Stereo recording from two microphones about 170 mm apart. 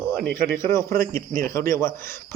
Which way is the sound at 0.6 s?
15° left (ahead or behind).